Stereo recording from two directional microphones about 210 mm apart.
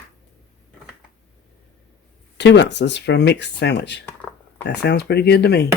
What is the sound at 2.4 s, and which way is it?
Speech, 55° left (ahead or behind).